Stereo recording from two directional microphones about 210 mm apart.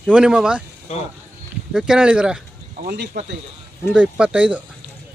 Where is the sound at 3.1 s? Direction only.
50° right (ahead or behind).